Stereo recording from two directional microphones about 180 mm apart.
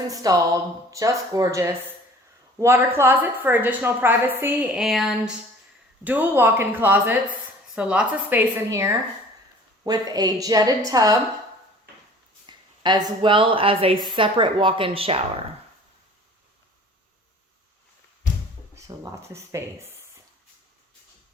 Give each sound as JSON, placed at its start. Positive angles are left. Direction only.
{"t": 0.1, "sound": "a woman's voice", "side_deg": -20}
{"t": 12.5, "sound": "a woman's voice", "side_deg": -25}
{"t": 18.9, "sound": "a woman's voice", "side_deg": -15}